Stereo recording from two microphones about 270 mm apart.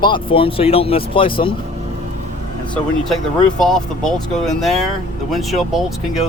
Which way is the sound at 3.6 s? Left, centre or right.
Centre.